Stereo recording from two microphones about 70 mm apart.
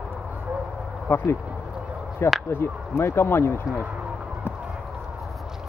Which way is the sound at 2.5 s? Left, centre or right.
Left.